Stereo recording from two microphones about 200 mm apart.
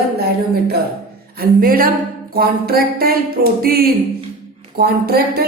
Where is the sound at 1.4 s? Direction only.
45° right (ahead or behind).